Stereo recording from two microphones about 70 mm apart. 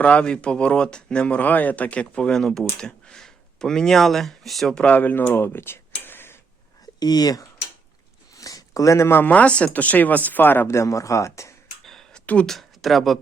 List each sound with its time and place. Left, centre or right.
0.0 s speech: centre
4.7 s speech: centre
4.9 s speech: left
5.3 s speech: left
7.0 s speech: left
8.3 s a sound: left
9.3 s speech: centre
10.7 s speech: left
11.9 s a sound: centre
12.2 s speech: left
12.5 s speech: centre